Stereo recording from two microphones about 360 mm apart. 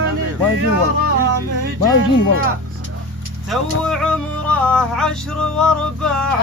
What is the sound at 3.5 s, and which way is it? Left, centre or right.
Music, centre.